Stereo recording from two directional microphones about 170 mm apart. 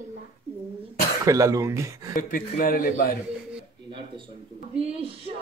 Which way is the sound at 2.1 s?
55° left (ahead or behind).